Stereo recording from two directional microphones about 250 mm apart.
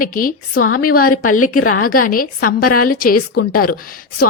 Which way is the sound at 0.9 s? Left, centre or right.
Left.